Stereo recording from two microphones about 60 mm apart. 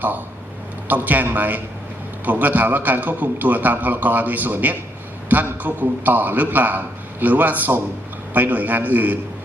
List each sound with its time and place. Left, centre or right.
0.9 s a man's voice: right